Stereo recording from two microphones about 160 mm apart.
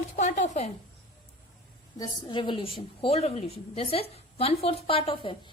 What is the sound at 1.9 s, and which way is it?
A woman's voice, 25° left (ahead or behind).